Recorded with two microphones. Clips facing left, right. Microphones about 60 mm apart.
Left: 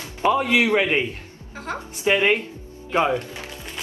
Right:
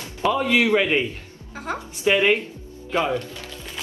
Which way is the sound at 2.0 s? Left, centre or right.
Left.